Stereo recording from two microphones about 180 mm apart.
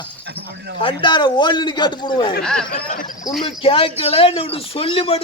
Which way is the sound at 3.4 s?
30° left (ahead or behind).